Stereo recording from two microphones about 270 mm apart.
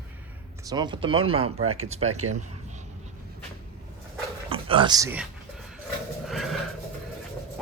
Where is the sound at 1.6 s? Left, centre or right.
Right.